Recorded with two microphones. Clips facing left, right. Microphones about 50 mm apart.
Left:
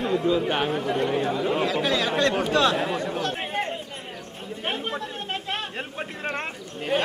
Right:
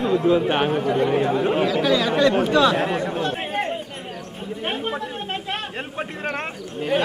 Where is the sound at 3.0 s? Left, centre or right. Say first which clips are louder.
Right 3 dB; centre.